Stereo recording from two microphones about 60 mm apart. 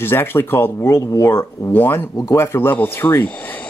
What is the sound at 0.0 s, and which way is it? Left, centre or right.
Speech, left.